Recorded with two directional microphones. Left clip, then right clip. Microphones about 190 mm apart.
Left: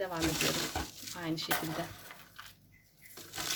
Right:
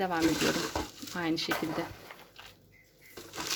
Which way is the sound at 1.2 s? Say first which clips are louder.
Right 6 dB; 45° right (ahead or behind).